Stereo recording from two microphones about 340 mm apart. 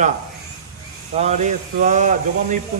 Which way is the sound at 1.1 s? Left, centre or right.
Centre.